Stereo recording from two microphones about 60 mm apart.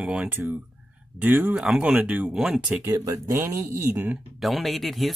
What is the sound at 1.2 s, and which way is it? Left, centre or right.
Speech, right.